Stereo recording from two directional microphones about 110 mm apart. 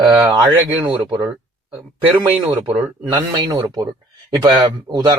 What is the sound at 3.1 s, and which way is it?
A man's voice, 35° right (ahead or behind).